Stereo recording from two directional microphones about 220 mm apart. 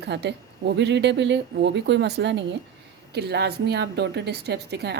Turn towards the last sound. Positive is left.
turn(degrees=-50)  # may be behind; listen again after turning